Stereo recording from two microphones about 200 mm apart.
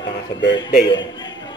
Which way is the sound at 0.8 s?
20° left (ahead or behind).